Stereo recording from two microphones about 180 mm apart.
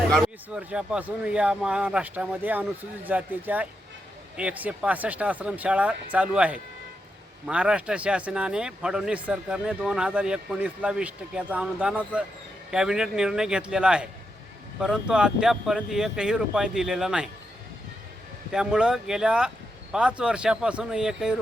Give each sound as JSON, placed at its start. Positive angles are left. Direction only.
{"t": 0.1, "sound": "speech", "side_deg": 0}
{"t": 18.5, "sound": "speech", "side_deg": -5}